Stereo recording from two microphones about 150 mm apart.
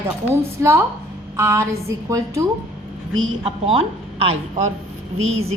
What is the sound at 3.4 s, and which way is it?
Speech, 40° right (ahead or behind).